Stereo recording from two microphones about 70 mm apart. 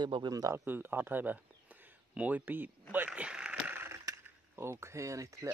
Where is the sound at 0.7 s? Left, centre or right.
Right.